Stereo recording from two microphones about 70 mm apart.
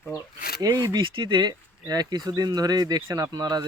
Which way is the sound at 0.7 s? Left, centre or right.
Right.